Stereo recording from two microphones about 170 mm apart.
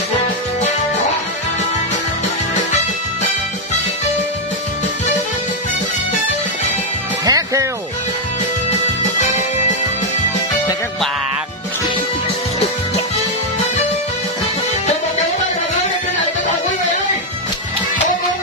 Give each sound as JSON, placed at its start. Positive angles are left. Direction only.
{"t": 7.2, "sound": "music", "side_deg": -20}